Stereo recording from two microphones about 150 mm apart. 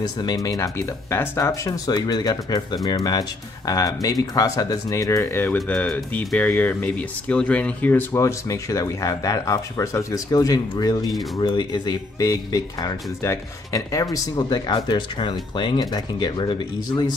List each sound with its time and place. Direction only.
0.0 s speech: 25° left (ahead or behind); by 8.0 s 10° left (ahead or behind)
8.1 s speech: 20° left (ahead or behind)